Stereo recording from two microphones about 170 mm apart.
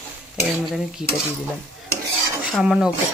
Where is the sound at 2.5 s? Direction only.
5° right (ahead or behind).